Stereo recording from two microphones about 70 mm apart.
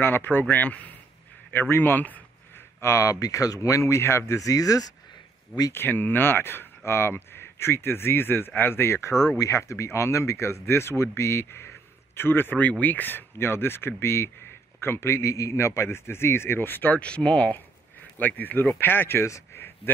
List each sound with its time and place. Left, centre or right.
0.0 s speech: left
2.8 s speech: left
4.3 s speech: left
5.7 s speech: left
17.0 s speech: centre; by 19.6 s left